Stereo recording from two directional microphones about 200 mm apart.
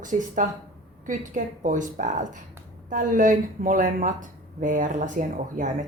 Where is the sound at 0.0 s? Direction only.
40° right (ahead or behind).